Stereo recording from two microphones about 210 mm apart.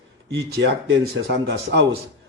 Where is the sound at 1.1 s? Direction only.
55° right (ahead or behind).